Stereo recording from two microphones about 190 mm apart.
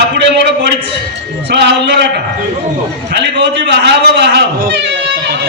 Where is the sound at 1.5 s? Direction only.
65° right (ahead or behind).